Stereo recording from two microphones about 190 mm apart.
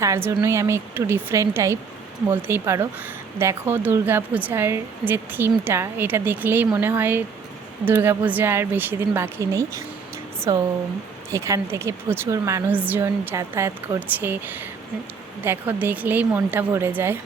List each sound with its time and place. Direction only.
0.0 s speech: 15° right (ahead or behind)